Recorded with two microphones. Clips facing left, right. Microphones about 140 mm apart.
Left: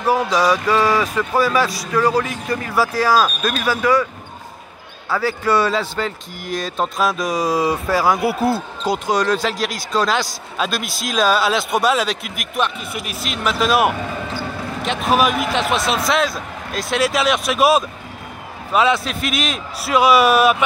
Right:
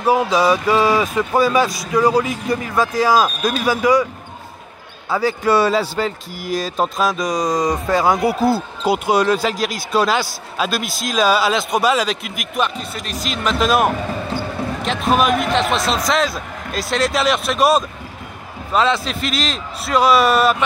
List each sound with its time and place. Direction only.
0.0 s speech: 15° right (ahead or behind)
5.1 s speech: 15° right (ahead or behind); by 20.5 s 5° left (ahead or behind)